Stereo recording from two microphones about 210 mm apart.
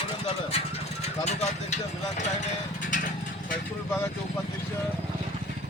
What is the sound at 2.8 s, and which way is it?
Vehicle, 40° left (ahead or behind).